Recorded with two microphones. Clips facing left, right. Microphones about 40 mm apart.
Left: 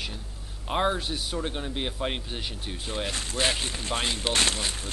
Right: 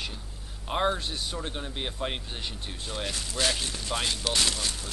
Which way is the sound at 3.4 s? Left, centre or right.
Left.